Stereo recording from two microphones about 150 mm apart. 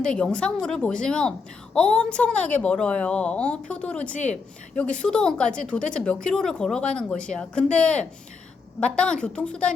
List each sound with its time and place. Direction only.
0.0 s a woman's voice: 5° left (ahead or behind)
4.1 s a woman's voice: 50° left (ahead or behind)
4.7 s a woman's voice: 10° left (ahead or behind)